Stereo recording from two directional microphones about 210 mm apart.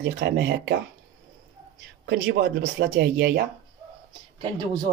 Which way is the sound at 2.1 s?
55° right (ahead or behind).